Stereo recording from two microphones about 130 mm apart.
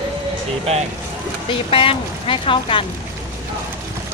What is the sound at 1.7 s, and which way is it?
Speech, 45° left (ahead or behind).